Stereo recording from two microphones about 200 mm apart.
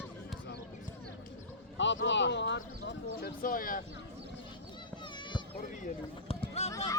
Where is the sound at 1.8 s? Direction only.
65° left (ahead or behind); by 3.8 s 45° left (ahead or behind).